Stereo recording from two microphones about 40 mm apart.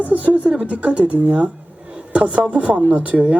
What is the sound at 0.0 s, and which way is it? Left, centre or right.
Speech, right.